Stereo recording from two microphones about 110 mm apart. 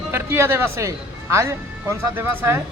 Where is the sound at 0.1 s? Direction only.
20° right (ahead or behind).